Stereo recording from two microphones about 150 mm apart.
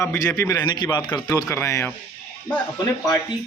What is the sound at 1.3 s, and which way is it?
Speech, 20° left (ahead or behind).